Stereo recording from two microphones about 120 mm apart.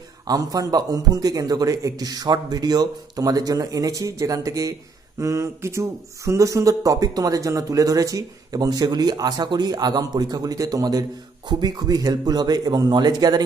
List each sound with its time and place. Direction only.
0.3 s speech: 30° right (ahead or behind)